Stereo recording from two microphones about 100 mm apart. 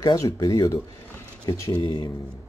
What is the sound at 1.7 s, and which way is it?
Speech, 45° left (ahead or behind).